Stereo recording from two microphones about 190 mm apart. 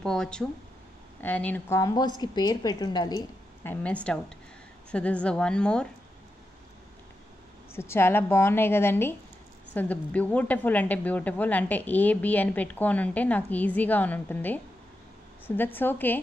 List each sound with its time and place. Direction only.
0.0 s a woman's voice: 5° left (ahead or behind); by 3.2 s 20° left (ahead or behind)
3.6 s a woman's voice: 10° left (ahead or behind)
7.7 s speech: 15° left (ahead or behind)